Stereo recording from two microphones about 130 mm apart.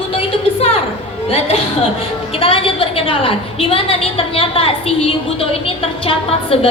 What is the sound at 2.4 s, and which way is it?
A woman's voice, 45° left (ahead or behind).